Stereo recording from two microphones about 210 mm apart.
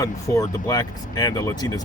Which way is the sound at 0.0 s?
15° left (ahead or behind).